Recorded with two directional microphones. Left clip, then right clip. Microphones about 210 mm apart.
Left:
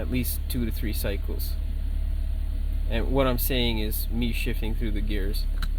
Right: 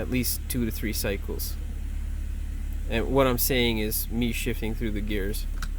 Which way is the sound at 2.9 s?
25° right (ahead or behind).